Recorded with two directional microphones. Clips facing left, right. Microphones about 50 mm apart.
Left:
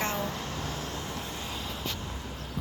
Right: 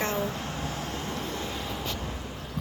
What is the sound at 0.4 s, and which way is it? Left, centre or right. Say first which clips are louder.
Vehicle: right 2 dB; right.